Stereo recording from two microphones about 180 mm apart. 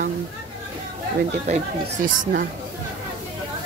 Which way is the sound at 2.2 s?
55° right (ahead or behind).